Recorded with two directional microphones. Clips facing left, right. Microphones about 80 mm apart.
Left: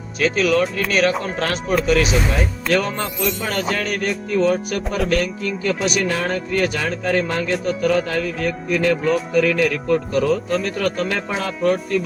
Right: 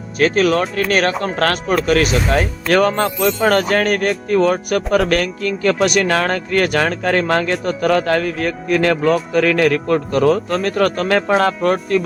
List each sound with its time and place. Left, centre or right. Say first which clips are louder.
0.2 s speech: right 3 dB; right